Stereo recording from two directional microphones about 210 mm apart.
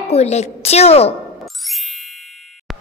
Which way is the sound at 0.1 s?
30° left (ahead or behind).